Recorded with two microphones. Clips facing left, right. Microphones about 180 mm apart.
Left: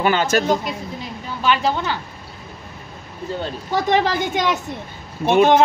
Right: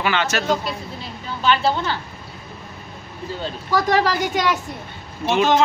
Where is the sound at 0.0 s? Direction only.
40° left (ahead or behind).